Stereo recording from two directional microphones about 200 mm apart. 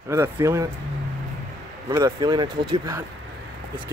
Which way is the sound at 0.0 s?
15° right (ahead or behind).